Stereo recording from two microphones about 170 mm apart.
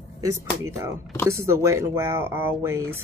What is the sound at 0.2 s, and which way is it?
Speech, 15° right (ahead or behind).